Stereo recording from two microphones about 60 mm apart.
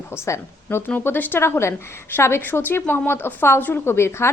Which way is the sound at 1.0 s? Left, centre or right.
Left.